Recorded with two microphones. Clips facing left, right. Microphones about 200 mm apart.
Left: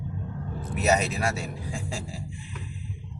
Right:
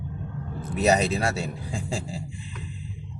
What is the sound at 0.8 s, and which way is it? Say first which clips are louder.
Speech: right 3 dB; 35° right (ahead or behind).